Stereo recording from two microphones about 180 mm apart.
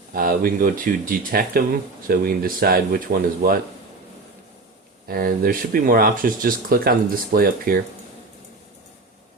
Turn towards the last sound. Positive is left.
turn(degrees=-55)  # may be behind; listen again after turning